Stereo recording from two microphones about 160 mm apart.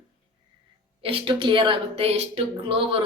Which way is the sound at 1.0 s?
35° right (ahead or behind).